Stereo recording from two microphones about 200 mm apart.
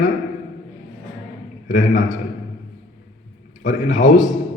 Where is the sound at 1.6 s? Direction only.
40° left (ahead or behind).